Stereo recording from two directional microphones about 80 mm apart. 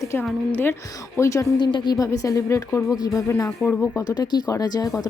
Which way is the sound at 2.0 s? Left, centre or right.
Left.